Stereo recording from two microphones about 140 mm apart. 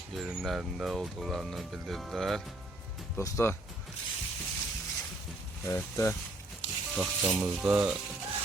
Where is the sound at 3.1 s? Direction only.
15° left (ahead or behind).